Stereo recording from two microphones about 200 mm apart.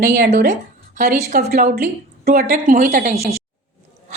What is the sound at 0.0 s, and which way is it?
A woman's voice, 40° right (ahead or behind).